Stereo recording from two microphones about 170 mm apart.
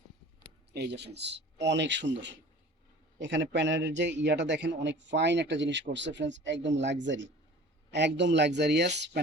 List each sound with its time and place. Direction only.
0.7 s a man's voice: 75° right (ahead or behind)